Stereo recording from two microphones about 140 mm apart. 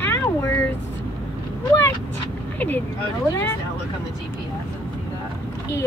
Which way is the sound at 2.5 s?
10° left (ahead or behind).